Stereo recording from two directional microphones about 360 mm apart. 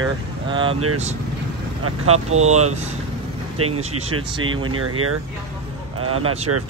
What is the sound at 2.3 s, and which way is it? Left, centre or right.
Speech, centre.